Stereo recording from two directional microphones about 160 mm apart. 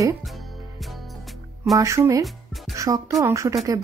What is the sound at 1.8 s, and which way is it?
Speech, 20° right (ahead or behind).